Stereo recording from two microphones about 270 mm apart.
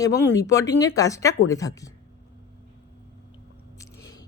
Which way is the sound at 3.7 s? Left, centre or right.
Centre.